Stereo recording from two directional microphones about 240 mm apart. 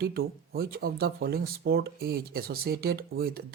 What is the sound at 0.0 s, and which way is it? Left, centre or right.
Speech, right.